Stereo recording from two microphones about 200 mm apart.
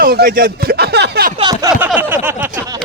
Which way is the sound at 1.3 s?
20° right (ahead or behind).